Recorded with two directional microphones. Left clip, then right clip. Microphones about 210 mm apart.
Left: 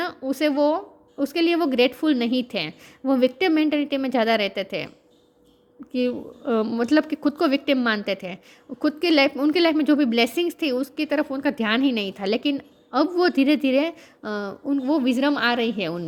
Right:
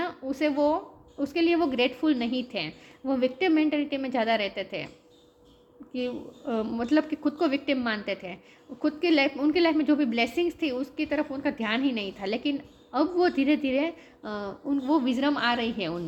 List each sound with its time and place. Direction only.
0.0 s a woman's voice: 45° left (ahead or behind)
5.9 s a woman's voice: 50° left (ahead or behind)